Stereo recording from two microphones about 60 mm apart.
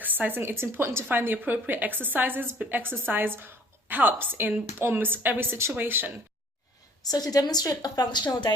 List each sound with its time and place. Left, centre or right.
0.0 s speech: right
0.5 s a woman's voice: right
1.1 s a woman's voice: right
7.0 s a woman's voice: left